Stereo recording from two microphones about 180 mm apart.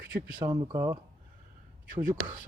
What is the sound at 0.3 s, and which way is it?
Speech, 20° right (ahead or behind).